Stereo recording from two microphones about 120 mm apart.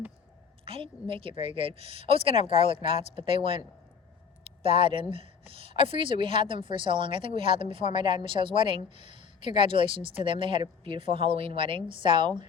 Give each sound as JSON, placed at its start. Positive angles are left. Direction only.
{"t": 0.6, "sound": "a woman's voice", "side_deg": -50}